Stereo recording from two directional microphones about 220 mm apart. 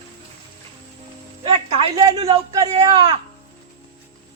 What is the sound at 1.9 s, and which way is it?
Speech, 20° right (ahead or behind).